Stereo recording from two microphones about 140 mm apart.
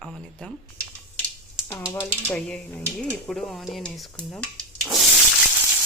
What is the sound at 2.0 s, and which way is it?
A woman's voice, 15° left (ahead or behind).